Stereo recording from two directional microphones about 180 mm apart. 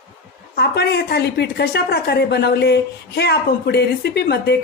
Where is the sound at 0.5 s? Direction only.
65° left (ahead or behind).